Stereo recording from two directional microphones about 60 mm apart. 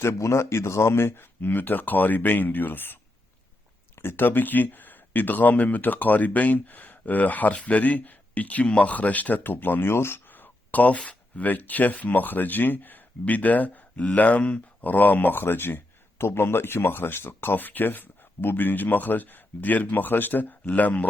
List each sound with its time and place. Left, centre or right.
0.0 s speech: left